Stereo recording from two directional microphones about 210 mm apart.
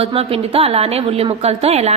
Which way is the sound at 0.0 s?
25° right (ahead or behind).